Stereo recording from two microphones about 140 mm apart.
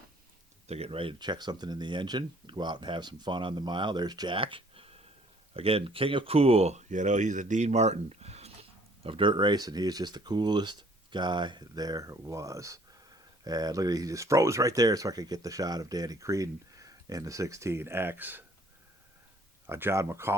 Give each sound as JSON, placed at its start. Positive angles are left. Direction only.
{"t": 0.7, "sound": "speech", "side_deg": -45}
{"t": 9.0, "sound": "speech", "side_deg": -35}
{"t": 19.6, "sound": "speech", "side_deg": -20}